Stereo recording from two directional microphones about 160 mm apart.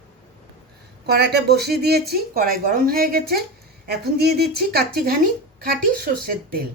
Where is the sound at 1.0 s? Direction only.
85° right.